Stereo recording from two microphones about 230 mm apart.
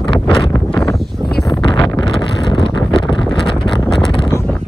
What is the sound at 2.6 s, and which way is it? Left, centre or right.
Vehicle, centre.